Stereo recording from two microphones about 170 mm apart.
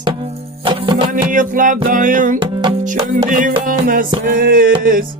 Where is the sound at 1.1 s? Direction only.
50° right (ahead or behind).